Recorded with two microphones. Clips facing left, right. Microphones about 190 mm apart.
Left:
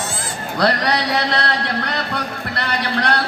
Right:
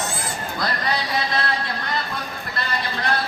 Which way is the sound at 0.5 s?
75° left (ahead or behind).